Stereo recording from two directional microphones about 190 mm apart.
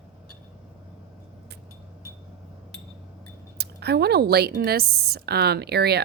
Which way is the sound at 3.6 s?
55° right (ahead or behind).